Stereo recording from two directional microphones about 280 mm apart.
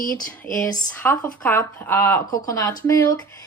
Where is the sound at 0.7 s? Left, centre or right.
Centre.